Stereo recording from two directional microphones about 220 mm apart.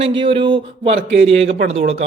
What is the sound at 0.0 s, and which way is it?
A man's voice, 25° right (ahead or behind).